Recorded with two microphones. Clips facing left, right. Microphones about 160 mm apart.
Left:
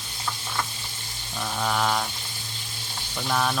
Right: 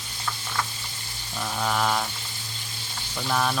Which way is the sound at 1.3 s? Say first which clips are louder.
Even; centre (ahead or behind).